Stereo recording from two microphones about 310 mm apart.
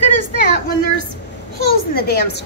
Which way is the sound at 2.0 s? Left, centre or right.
Left.